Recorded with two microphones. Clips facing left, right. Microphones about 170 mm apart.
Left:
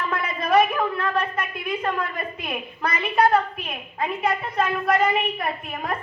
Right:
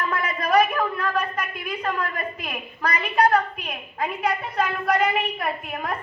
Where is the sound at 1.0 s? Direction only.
5° left (ahead or behind).